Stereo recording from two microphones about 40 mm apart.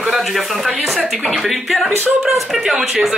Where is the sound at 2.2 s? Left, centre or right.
Centre.